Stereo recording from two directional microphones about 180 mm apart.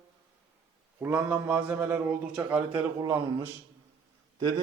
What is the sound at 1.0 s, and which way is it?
A man's voice, 10° right (ahead or behind).